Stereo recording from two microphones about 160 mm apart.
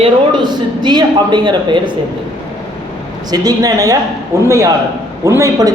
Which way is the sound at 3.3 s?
25° right (ahead or behind).